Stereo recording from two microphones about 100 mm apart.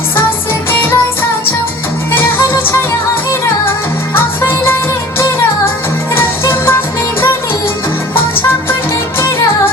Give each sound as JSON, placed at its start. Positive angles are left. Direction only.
{"t": 0.7, "sound": "music", "side_deg": 25}
{"t": 2.1, "sound": "music", "side_deg": 25}
{"t": 6.1, "sound": "music", "side_deg": 25}